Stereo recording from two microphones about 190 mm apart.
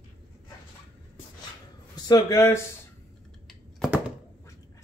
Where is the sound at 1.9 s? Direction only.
20° left (ahead or behind).